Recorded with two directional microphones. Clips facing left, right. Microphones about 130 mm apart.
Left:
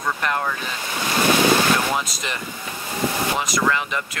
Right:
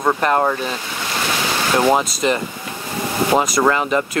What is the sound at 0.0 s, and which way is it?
Speech, 40° right (ahead or behind).